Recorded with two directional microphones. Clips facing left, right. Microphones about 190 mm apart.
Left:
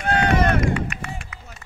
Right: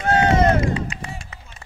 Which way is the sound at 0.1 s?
25° right (ahead or behind).